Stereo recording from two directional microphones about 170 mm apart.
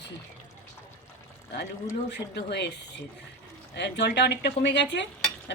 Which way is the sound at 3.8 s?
85° left.